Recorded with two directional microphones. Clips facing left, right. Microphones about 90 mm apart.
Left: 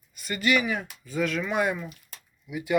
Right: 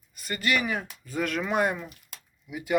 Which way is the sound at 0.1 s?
40° right (ahead or behind).